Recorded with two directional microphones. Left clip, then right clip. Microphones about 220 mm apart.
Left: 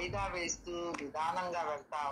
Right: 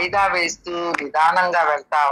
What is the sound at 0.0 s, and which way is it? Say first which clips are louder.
A woman's voice: right 19 dB; 45° right (ahead or behind).